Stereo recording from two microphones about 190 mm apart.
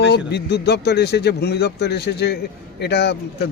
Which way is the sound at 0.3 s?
60° left (ahead or behind).